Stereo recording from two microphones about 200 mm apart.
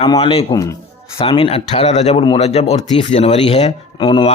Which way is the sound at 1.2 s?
30° left (ahead or behind).